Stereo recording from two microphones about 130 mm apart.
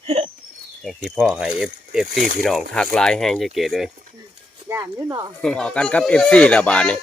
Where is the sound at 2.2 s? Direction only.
90° right.